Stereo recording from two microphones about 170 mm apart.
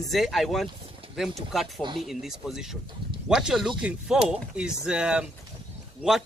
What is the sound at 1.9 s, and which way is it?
Speech, centre (ahead or behind).